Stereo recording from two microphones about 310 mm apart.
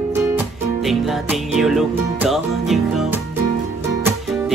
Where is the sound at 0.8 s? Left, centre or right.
Centre.